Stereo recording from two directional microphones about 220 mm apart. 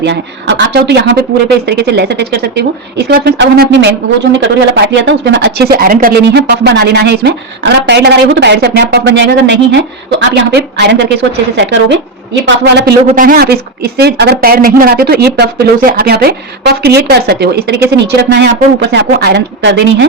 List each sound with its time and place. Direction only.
0.0 s speech: 55° right (ahead or behind)
13.1 s speech: 40° right (ahead or behind)